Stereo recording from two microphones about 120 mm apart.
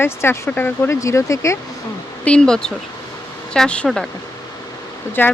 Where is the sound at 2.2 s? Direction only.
10° left (ahead or behind).